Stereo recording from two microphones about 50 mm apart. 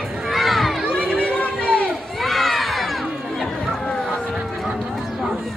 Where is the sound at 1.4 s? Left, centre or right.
Left.